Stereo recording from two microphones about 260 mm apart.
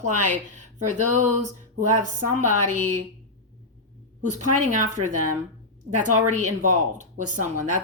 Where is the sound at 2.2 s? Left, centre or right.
Right.